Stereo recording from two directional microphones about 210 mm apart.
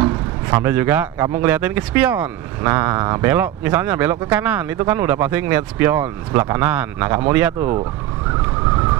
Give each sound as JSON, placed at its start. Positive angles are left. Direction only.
{"t": 0.6, "sound": "speech", "side_deg": -10}